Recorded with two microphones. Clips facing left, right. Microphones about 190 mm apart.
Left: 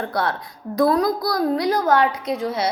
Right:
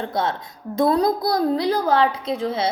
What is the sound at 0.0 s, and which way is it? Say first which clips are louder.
A woman's voice: even; 20° right (ahead or behind).